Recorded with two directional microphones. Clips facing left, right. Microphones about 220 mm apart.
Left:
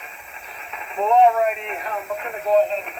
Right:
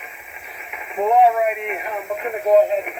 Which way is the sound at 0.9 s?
15° right (ahead or behind).